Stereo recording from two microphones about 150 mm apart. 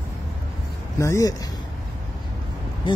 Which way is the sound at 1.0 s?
20° left (ahead or behind).